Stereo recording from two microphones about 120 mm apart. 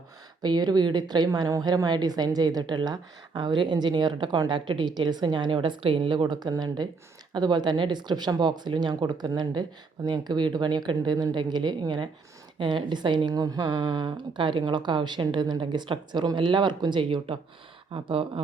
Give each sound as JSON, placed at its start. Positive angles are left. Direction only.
{"t": 0.4, "sound": "a woman's voice", "side_deg": -35}